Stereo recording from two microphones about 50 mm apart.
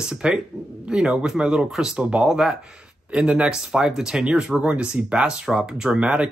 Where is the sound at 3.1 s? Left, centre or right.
Right.